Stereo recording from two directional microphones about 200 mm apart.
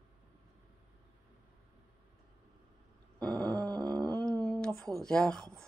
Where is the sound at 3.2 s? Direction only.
20° right (ahead or behind).